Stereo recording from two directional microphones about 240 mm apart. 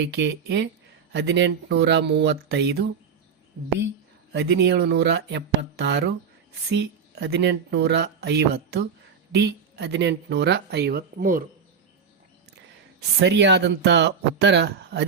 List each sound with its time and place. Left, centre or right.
0.0 s speech: right
4.3 s speech: right
13.1 s speech: right